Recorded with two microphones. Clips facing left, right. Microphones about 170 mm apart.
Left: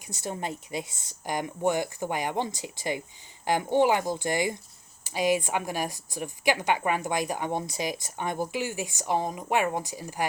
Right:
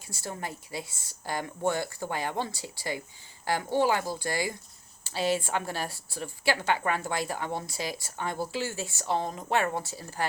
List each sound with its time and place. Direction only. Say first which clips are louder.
0.1 s a woman's voice: left 4 dB; 20° left (ahead or behind)